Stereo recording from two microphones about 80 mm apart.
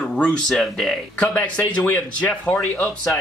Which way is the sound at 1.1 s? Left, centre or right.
Centre.